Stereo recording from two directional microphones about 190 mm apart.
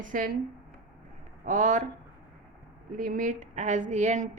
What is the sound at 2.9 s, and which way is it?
A woman's voice, 45° right (ahead or behind).